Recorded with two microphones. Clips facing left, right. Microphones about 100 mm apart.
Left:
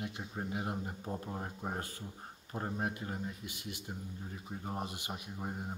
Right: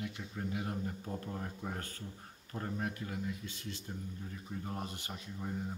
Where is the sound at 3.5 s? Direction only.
15° left (ahead or behind).